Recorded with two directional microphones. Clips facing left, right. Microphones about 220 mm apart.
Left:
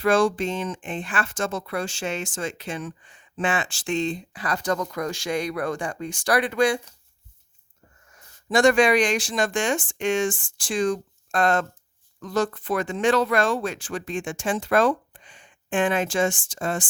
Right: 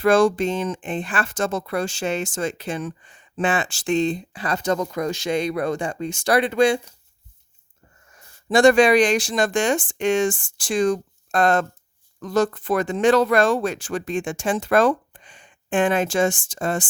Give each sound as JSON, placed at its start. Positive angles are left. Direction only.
{"t": 0.0, "sound": "speech", "side_deg": -45}
{"t": 8.1, "sound": "speech", "side_deg": -30}